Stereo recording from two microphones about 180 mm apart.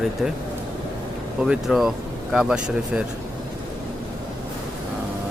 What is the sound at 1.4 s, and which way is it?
Speech, centre (ahead or behind).